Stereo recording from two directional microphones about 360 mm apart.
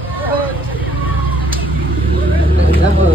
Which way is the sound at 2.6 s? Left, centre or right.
Right.